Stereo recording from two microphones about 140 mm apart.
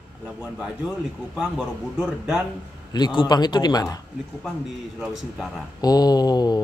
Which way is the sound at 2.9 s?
35° left (ahead or behind).